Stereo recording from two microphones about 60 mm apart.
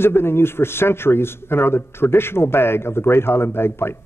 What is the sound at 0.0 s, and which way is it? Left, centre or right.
A man's voice, left.